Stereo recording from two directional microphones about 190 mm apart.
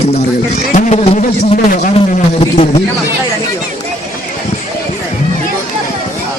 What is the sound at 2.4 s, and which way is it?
Speech, 30° left (ahead or behind).